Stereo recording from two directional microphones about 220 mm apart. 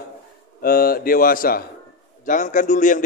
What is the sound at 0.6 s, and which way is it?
A man's voice, 40° left (ahead or behind).